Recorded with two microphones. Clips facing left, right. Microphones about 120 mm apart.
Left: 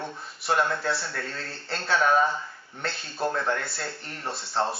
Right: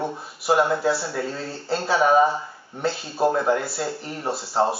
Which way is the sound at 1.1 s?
10° right (ahead or behind).